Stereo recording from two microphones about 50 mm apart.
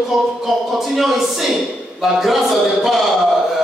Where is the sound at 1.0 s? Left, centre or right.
Centre.